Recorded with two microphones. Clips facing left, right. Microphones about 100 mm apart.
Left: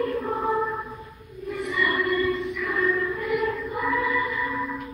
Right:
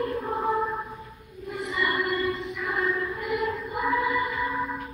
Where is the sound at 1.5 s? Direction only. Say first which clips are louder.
Left 2 dB; 20° right (ahead or behind).